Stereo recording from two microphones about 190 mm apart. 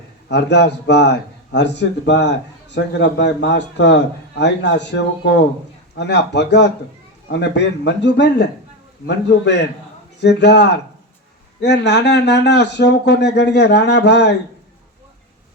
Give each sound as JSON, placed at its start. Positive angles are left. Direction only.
{"t": 0.3, "sound": "a man's voice", "side_deg": 65}